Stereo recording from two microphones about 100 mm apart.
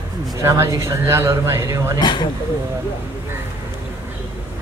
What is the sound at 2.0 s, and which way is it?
Speech, 50° left (ahead or behind).